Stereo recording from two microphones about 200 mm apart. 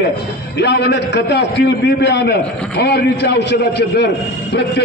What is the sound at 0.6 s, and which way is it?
A man's voice, 55° left (ahead or behind).